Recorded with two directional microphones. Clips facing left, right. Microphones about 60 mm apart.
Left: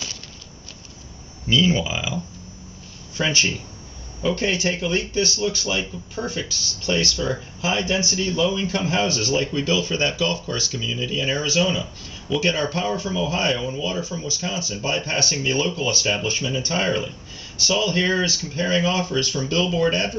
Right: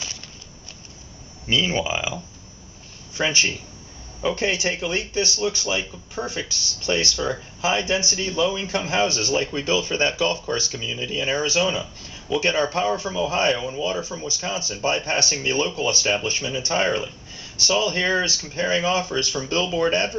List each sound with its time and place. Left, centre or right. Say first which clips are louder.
1.5 s speech: left 2 dB; right
3.2 s speech: even; centre